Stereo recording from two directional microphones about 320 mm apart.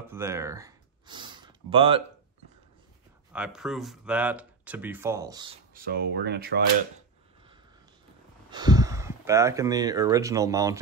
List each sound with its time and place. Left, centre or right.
0.1 s speech: centre
3.3 s speech: centre
5.8 s speech: right
8.5 s speech: centre